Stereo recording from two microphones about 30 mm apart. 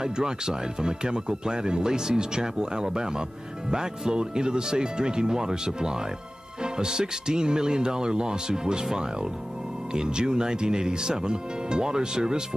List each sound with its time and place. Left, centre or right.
0.0 s speech: right
9.9 s speech: right